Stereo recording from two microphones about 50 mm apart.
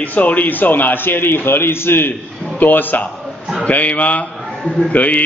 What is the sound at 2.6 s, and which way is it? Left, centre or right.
A man's voice, left.